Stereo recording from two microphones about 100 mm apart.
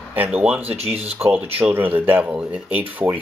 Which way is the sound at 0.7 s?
90° right.